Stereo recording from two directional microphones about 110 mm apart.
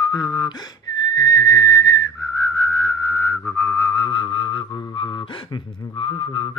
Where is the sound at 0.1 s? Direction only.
40° left (ahead or behind).